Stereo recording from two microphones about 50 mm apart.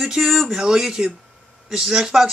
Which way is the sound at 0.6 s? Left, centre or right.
Centre.